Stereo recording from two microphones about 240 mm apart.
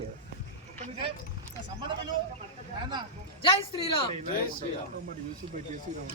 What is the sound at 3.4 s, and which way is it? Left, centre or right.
Speech, left.